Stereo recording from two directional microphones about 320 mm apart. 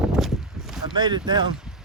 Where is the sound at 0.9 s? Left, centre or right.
Centre.